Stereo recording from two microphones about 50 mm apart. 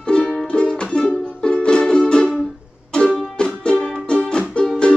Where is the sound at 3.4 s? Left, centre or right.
Left.